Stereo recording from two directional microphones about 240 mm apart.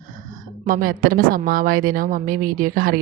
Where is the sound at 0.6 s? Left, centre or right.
Right.